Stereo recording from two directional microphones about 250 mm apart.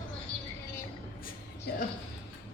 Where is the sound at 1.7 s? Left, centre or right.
Left.